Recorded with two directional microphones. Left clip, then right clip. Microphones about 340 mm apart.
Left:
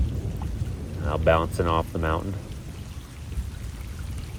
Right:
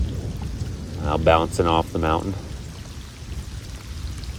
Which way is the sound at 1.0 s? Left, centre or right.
Right.